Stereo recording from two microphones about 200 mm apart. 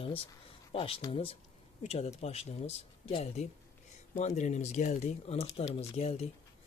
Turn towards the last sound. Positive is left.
turn(degrees=30)  # may be behind; listen again after turning